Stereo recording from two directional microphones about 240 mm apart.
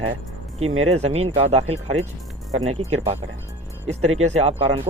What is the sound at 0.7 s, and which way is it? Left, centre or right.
Speech, right.